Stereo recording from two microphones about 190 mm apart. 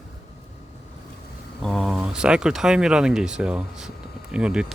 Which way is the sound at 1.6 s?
Centre (ahead or behind).